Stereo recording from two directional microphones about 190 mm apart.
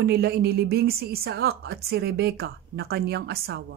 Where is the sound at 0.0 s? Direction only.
60° right (ahead or behind).